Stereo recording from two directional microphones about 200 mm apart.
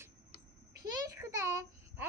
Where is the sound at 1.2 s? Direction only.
15° right (ahead or behind).